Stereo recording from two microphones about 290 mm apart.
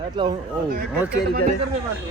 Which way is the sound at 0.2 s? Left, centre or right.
Centre.